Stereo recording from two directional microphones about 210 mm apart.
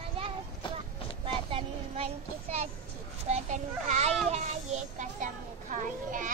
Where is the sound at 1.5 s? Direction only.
30° right (ahead or behind).